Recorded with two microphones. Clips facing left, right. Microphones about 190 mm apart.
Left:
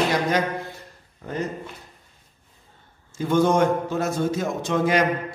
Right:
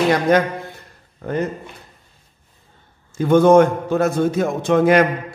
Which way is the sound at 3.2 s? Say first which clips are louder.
Right 8 dB; 55° right (ahead or behind).